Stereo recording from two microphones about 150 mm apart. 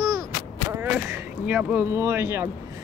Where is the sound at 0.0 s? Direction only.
20° right (ahead or behind).